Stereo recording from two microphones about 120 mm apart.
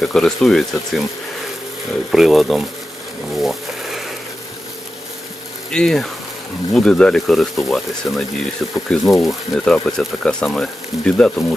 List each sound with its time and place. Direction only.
0.0 s speech: 5° left (ahead or behind)
2.1 s speech: centre (ahead or behind)
3.3 s a sound: centre (ahead or behind)
5.7 s speech: 5° left (ahead or behind)